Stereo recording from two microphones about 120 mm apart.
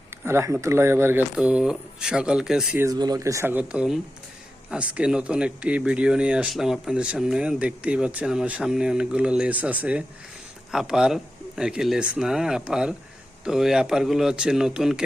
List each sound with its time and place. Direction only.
0.3 s speech: 20° right (ahead or behind)
1.4 s speech: 10° right (ahead or behind)
2.9 s speech: 35° right (ahead or behind)
3.5 s speech: 10° right (ahead or behind)